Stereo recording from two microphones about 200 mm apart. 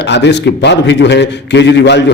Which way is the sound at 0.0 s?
60° left (ahead or behind).